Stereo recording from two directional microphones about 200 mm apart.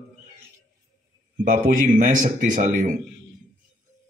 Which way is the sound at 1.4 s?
40° right (ahead or behind).